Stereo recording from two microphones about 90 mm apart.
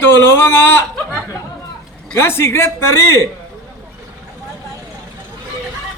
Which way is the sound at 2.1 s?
25° left (ahead or behind).